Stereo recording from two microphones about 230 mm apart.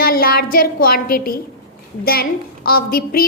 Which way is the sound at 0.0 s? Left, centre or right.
Left.